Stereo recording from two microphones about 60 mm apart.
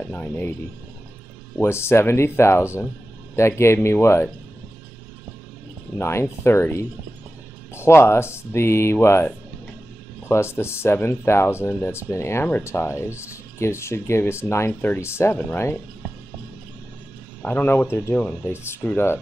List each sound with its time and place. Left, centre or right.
0.1 s speech: left
1.6 s speech: left
5.9 s speech: left
14.7 s speech: left
15.0 s speech: left
17.4 s speech: left
18.1 s speech: left
18.5 s speech: left